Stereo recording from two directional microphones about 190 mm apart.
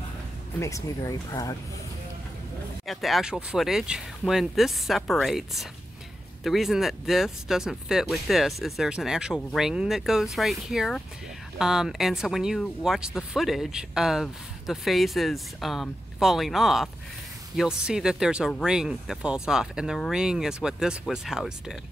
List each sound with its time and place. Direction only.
0.6 s speech: 15° left (ahead or behind)
2.9 s speech: centre (ahead or behind)